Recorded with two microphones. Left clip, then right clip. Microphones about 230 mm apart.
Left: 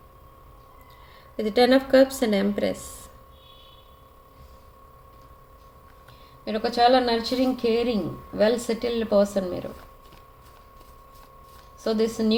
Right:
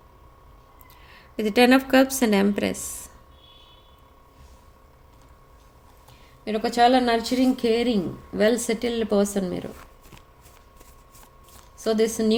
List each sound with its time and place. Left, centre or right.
1.1 s speech: right
6.4 s speech: right
11.8 s speech: right